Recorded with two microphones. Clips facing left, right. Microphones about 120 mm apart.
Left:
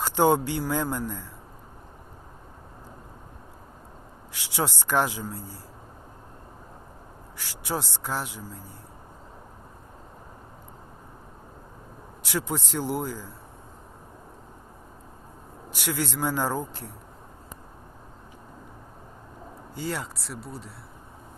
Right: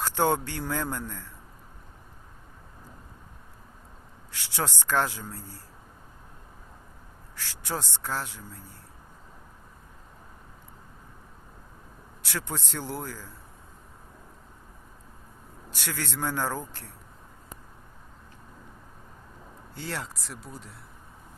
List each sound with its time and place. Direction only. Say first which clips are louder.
0.0 s a man's voice: left 4 dB; 15° left (ahead or behind)
4.3 s a man's voice: left 3 dB; 15° left (ahead or behind)
7.3 s a man's voice: left 3 dB; 15° left (ahead or behind)
12.2 s a man's voice: left 5 dB; 15° left (ahead or behind)
15.7 s a man's voice: left 5 dB; 15° left (ahead or behind)
19.7 s speech: left 4 dB; 5° left (ahead or behind)